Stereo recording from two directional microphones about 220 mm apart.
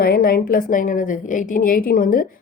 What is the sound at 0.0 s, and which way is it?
A woman's voice, 40° left (ahead or behind).